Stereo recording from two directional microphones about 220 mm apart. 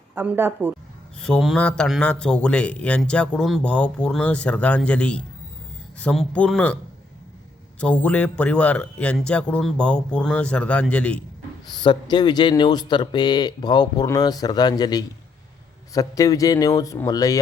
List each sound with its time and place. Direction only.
0.1 s speech: 10° right (ahead or behind)
1.2 s speech: centre (ahead or behind)
7.8 s speech: 5° left (ahead or behind)
11.7 s speech: 20° left (ahead or behind)